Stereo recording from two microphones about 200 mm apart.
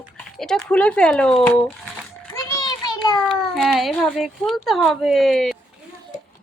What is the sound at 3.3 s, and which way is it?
Speech, centre (ahead or behind).